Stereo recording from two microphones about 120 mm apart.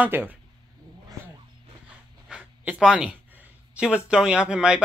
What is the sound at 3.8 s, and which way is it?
Speech, 10° right (ahead or behind).